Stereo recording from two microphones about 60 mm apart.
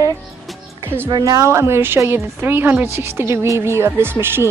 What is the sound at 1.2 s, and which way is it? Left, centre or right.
Speech, right.